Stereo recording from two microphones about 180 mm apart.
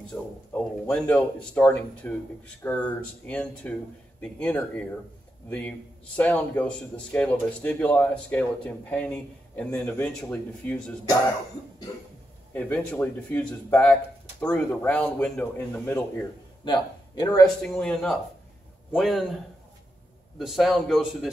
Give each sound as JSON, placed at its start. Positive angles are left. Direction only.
{"t": 0.0, "sound": "a man's voice", "side_deg": 5}
{"t": 12.5, "sound": "a man's voice", "side_deg": 10}
{"t": 16.6, "sound": "speech", "side_deg": 25}
{"t": 17.7, "sound": "a man's voice", "side_deg": 5}
{"t": 20.3, "sound": "a man's voice", "side_deg": 0}